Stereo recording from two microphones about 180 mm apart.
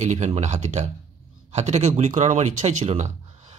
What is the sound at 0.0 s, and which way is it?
A man's voice, 40° right (ahead or behind).